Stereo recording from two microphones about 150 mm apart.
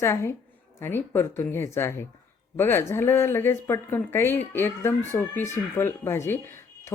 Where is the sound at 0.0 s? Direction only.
15° left (ahead or behind).